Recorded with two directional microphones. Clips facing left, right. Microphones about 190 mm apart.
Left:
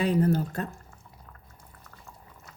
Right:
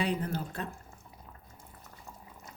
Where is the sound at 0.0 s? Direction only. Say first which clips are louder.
Left 8 dB; 40° left (ahead or behind).